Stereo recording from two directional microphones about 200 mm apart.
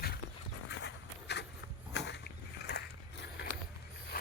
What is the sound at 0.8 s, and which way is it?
Walk, 55° left (ahead or behind).